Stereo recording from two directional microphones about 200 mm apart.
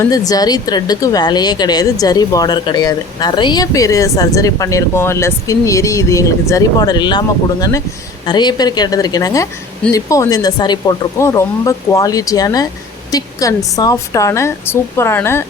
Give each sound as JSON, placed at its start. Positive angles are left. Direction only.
{"t": 0.1, "sound": "speech", "side_deg": 20}
{"t": 13.1, "sound": "a sound", "side_deg": 15}
{"t": 13.7, "sound": "speech", "side_deg": 15}